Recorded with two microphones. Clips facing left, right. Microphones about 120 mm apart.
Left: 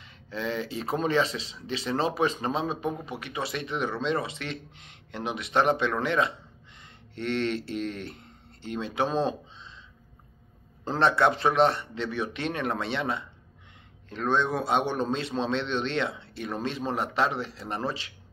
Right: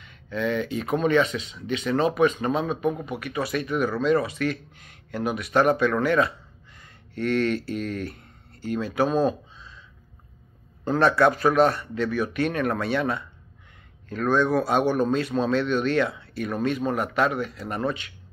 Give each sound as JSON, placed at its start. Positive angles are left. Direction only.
{"t": 0.0, "sound": "speech", "side_deg": 30}
{"t": 10.9, "sound": "speech", "side_deg": 25}